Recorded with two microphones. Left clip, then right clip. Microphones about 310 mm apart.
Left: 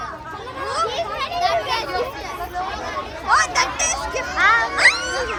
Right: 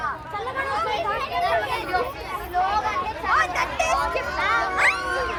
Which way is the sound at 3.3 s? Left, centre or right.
Centre.